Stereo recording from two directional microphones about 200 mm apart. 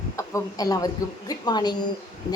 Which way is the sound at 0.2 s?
15° left (ahead or behind).